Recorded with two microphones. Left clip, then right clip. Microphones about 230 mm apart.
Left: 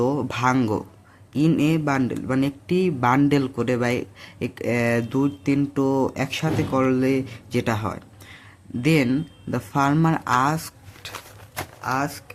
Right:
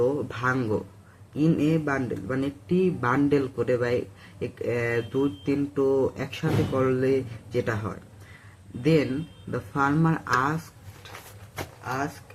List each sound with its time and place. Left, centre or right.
0.0 s speech: left
11.8 s speech: left